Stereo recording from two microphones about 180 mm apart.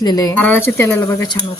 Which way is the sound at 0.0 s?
20° left (ahead or behind).